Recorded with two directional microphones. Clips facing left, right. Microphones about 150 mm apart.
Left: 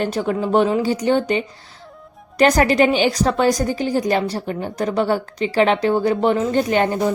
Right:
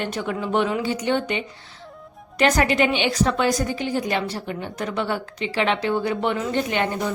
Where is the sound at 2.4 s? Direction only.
40° left (ahead or behind).